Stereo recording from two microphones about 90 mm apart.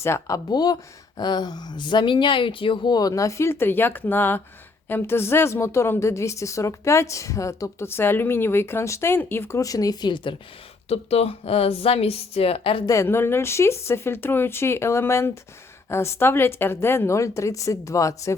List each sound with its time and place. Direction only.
0.0 s speech: 35° left (ahead or behind); by 2.9 s 70° left (ahead or behind)
2.9 s a woman's voice: 45° left (ahead or behind); by 9.6 s 25° left (ahead or behind)
9.6 s speech: 40° left (ahead or behind); by 10.3 s 55° left (ahead or behind)
10.8 s speech: 90° left
12.8 s a woman's voice: 40° left (ahead or behind)
13.1 s a woman's voice: 25° left (ahead or behind)